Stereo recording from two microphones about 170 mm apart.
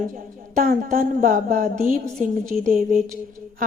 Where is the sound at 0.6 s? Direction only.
55° right (ahead or behind).